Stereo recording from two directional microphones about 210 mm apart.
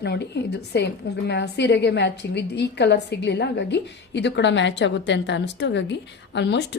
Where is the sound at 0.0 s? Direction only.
55° left (ahead or behind).